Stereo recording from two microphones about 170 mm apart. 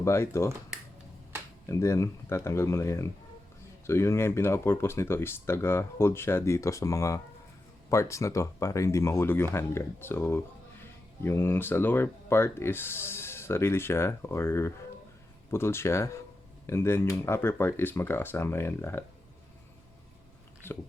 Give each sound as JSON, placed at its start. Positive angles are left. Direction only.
{"t": 0.0, "sound": "speech", "side_deg": 15}
{"t": 1.6, "sound": "speech", "side_deg": 15}
{"t": 20.6, "sound": "a sound", "side_deg": 10}